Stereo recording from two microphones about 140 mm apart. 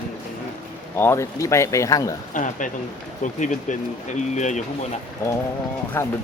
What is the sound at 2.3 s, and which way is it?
Speech, 65° left (ahead or behind).